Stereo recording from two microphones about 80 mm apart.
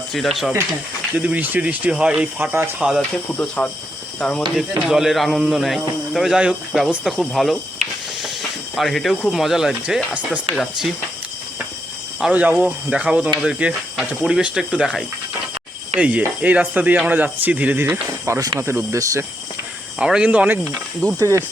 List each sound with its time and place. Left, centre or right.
0.1 s speech: centre
1.1 s speech: centre
2.4 s speech: right
2.7 s speech: centre
3.3 s speech: centre
4.9 s speech: centre
12.3 s speech: centre
16.0 s speech: centre
18.3 s speech: right
18.6 s speech: right
20.0 s speech: centre
21.2 s speech: right